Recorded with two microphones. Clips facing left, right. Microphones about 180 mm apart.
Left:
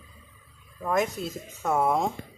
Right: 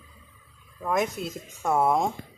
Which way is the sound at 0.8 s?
Centre (ahead or behind).